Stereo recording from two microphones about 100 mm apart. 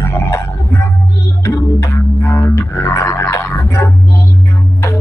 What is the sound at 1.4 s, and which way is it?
Music, 30° left (ahead or behind).